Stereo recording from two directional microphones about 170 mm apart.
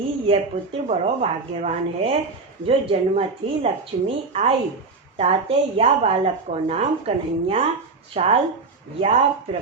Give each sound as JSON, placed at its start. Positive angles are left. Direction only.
{"t": 0.3, "sound": "a woman's voice", "side_deg": -35}